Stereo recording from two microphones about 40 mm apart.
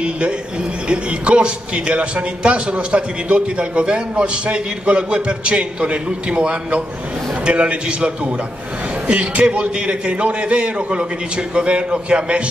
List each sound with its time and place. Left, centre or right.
0.0 s a man's voice: right
9.0 s a man's voice: right